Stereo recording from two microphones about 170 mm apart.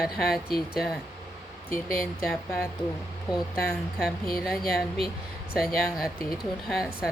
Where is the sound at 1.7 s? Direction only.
55° left (ahead or behind).